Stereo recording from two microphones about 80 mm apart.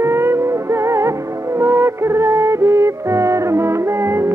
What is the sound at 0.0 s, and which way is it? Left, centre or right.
Music, right.